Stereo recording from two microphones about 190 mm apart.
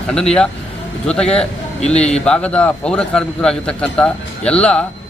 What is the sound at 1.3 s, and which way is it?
Speech, 35° left (ahead or behind).